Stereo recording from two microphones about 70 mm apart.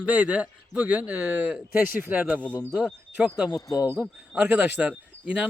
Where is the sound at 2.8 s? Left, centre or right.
Centre.